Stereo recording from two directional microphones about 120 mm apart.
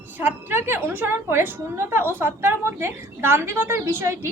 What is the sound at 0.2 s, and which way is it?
A woman's voice, 15° right (ahead or behind).